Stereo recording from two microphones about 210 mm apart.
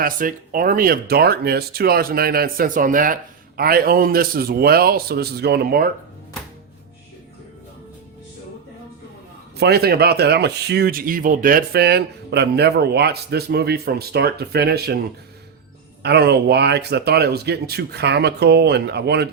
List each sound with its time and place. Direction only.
0.0 s speech: 40° right (ahead or behind)
9.6 s speech: 50° right (ahead or behind)
16.0 s speech: 50° right (ahead or behind)